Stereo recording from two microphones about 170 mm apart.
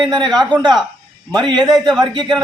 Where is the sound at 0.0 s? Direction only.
25° right (ahead or behind).